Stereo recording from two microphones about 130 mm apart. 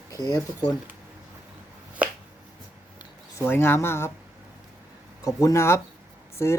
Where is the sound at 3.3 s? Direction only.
20° left (ahead or behind).